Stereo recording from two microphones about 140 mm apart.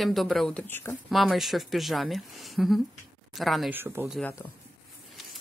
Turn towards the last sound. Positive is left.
turn(degrees=-15)  # may be behind; listen again after turning